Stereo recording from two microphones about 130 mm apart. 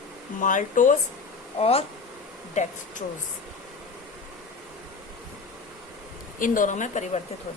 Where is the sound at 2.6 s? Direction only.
65° left (ahead or behind).